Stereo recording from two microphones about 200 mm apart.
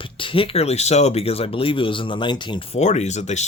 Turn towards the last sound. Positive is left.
turn(degrees=35)  # may be behind; listen again after turning